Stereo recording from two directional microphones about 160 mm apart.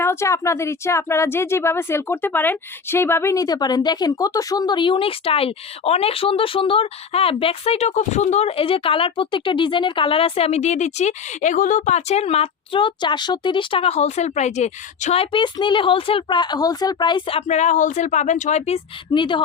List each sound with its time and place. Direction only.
0.0 s speech: 15° left (ahead or behind)